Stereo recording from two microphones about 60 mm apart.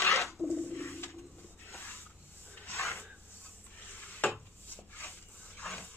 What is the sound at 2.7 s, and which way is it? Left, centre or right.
Filing, left.